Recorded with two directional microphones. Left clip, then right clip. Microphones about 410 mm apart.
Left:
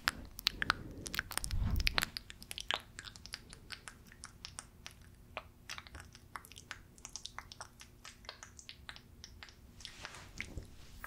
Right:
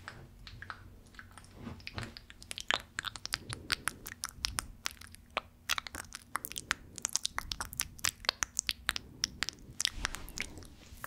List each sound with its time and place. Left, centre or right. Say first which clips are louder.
0.0 s chewing: left 14 dB; left
2.4 s chewing: right 5 dB; centre
3.2 s a sound: right 10 dB; right